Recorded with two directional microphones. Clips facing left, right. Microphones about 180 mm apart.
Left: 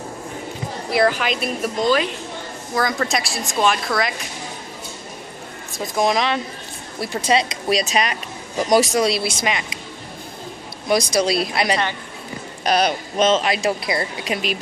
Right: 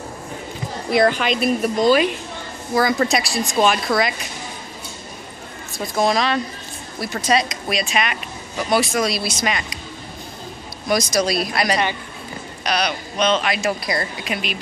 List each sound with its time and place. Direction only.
0.9 s speech: 5° left (ahead or behind)
5.9 s speech: 20° left (ahead or behind); by 8.2 s 35° left (ahead or behind)
8.9 s speech: 25° left (ahead or behind)
10.9 s speech: 25° left (ahead or behind)
12.6 s speech: 45° left (ahead or behind)
13.4 s speech: 30° left (ahead or behind)
14.2 s speech: 35° left (ahead or behind)